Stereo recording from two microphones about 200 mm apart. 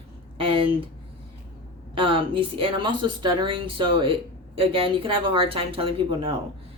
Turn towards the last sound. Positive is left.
turn(degrees=-25)  # may be behind; listen again after turning